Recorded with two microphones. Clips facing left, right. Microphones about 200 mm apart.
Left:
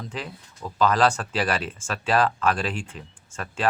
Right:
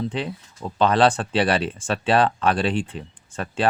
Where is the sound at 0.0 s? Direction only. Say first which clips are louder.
Right 8 dB; 30° right (ahead or behind).